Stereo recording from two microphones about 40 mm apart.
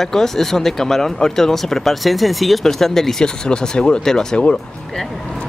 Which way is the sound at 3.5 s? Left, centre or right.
Left.